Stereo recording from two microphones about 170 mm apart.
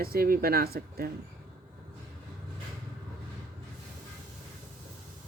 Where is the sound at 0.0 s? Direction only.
60° right (ahead or behind).